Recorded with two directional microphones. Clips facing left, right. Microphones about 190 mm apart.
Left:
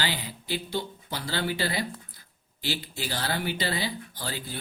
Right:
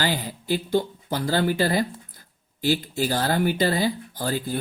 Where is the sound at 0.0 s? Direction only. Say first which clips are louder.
Right 6 dB; 45° right (ahead or behind).